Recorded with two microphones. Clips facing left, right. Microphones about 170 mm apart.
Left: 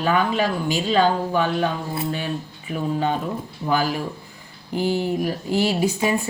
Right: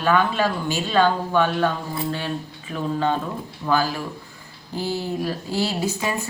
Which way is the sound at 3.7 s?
15° left (ahead or behind).